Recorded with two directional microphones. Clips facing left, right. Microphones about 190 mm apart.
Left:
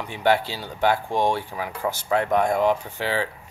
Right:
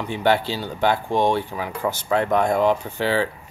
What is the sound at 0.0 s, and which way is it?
Speech, 30° right (ahead or behind).